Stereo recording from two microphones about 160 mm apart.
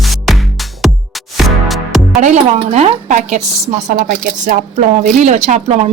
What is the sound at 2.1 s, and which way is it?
Speech, 45° right (ahead or behind).